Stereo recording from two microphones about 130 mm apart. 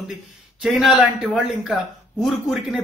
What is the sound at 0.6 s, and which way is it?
A man's voice, centre (ahead or behind).